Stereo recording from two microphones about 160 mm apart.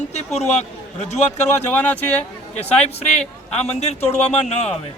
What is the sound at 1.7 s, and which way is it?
Speech, 10° left (ahead or behind).